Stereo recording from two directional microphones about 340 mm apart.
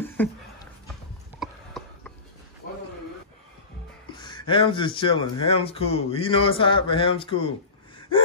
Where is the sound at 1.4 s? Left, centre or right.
Centre.